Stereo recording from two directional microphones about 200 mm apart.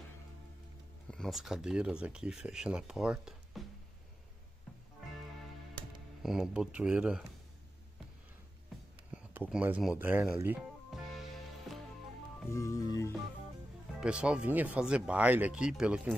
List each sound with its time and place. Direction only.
1.0 s speech: 5° left (ahead or behind)
6.2 s speech: centre (ahead or behind)
9.1 s speech: 5° right (ahead or behind)
11.7 s music: centre (ahead or behind)
12.4 s music: 15° left (ahead or behind)
13.9 s speech: 5° right (ahead or behind)